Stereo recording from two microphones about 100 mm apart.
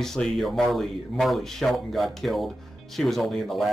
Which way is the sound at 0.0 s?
5° left (ahead or behind).